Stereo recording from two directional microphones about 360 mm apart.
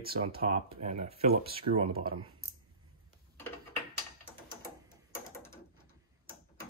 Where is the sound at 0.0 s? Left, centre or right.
Right.